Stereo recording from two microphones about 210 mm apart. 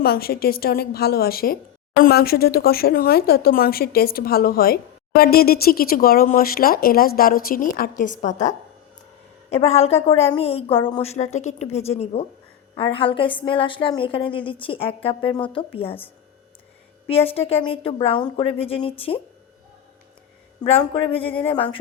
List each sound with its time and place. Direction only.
0.0 s a woman's voice: 45° left (ahead or behind); by 16.0 s 25° left (ahead or behind)
17.1 s a woman's voice: 25° left (ahead or behind)
20.7 s a woman's voice: 25° left (ahead or behind)